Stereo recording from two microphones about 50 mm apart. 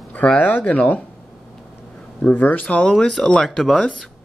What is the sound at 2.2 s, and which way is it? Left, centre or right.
Speech, left.